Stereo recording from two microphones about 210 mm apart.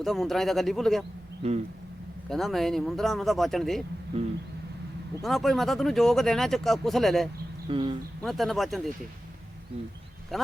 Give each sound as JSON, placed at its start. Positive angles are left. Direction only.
{"t": 0.0, "sound": "speech", "side_deg": 0}
{"t": 1.4, "sound": "speech", "side_deg": -30}
{"t": 2.3, "sound": "speech", "side_deg": 0}
{"t": 5.2, "sound": "speech", "side_deg": 0}
{"t": 7.7, "sound": "speech", "side_deg": -25}
{"t": 8.2, "sound": "speech", "side_deg": 0}
{"t": 10.3, "sound": "speech", "side_deg": 0}